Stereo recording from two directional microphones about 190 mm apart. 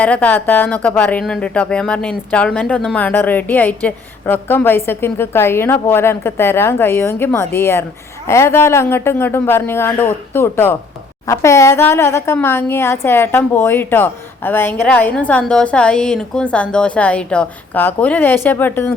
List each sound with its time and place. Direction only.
0.0 s speech: 10° left (ahead or behind)